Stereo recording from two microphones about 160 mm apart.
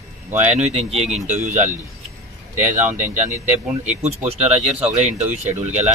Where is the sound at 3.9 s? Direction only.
40° right (ahead or behind).